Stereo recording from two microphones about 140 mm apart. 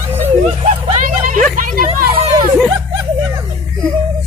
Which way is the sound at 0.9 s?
70° right (ahead or behind).